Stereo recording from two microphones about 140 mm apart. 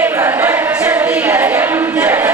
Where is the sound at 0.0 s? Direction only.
15° right (ahead or behind).